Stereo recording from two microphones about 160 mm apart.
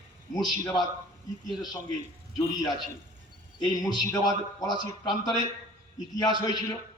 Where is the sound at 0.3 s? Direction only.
25° left (ahead or behind).